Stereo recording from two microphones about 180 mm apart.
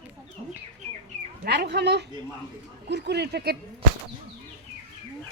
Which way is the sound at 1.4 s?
65° right (ahead or behind).